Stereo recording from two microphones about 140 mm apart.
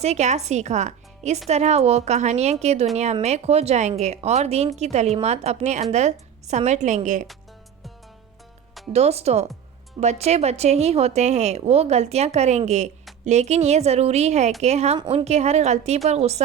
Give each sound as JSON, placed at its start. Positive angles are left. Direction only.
{"t": 0.0, "sound": "a woman's voice", "side_deg": -55}
{"t": 8.9, "sound": "speech", "side_deg": -50}
{"t": 14.9, "sound": "a woman's voice", "side_deg": -35}
{"t": 15.2, "sound": "speech", "side_deg": -50}